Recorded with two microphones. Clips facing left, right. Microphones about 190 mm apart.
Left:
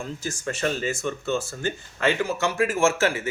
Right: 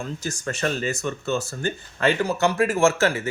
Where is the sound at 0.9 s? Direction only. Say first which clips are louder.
Right 1 dB; 70° right (ahead or behind).